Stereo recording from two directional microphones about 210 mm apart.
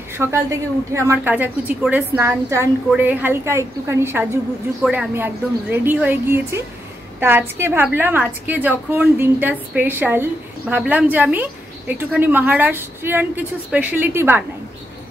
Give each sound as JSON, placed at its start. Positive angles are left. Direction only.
{"t": 0.2, "sound": "a woman's voice", "side_deg": -10}